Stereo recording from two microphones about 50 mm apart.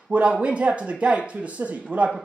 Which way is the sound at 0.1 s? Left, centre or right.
Right.